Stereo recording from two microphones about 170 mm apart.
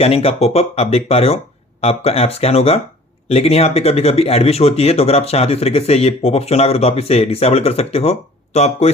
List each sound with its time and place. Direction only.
0.0 s speech: 35° left (ahead or behind)